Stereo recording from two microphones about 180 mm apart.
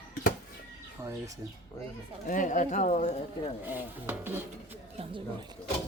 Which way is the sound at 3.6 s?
10° right (ahead or behind).